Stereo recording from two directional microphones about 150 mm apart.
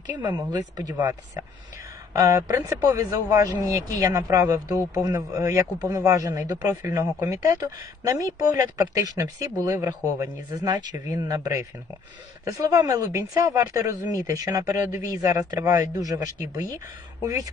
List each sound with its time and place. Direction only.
0.2 s speech: 30° right (ahead or behind)